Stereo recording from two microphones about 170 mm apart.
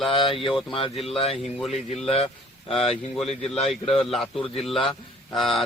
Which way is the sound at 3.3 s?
35° left (ahead or behind).